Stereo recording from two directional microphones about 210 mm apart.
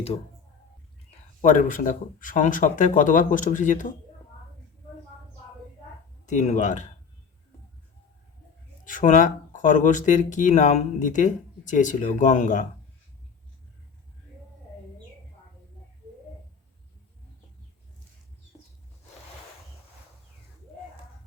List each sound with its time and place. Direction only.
1.4 s speech: 35° left (ahead or behind)
6.2 s speech: 35° left (ahead or behind)
8.8 s speech: 40° left (ahead or behind)